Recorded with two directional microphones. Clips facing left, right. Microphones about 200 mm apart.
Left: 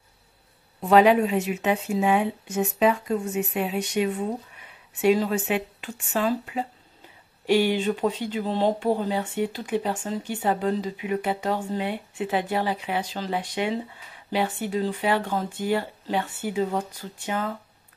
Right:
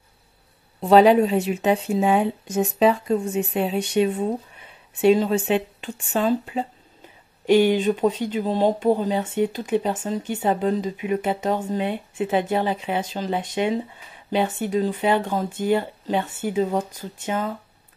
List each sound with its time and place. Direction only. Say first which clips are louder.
0.7 s speech: right 3 dB; 30° right (ahead or behind)